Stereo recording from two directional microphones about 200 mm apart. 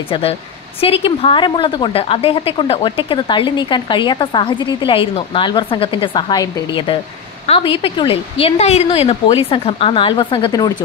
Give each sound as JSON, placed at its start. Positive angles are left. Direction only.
{"t": 0.1, "sound": "speech", "side_deg": 30}